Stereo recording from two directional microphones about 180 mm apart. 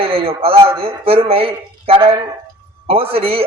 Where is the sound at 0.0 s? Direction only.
30° right (ahead or behind).